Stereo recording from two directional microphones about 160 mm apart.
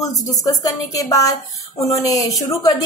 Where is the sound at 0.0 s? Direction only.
20° left (ahead or behind).